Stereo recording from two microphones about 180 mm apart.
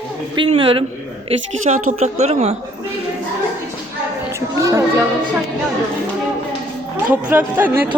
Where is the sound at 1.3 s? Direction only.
40° right (ahead or behind).